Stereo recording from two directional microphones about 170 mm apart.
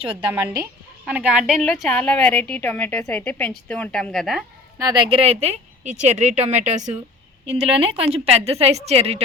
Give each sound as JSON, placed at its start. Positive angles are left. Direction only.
{"t": 0.1, "sound": "a woman's voice", "side_deg": -10}
{"t": 4.8, "sound": "speech", "side_deg": -25}